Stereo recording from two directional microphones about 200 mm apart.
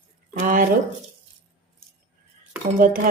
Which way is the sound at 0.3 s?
40° right (ahead or behind).